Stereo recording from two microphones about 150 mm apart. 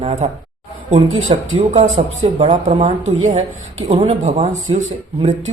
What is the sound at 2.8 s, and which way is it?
Speech, 55° right (ahead or behind).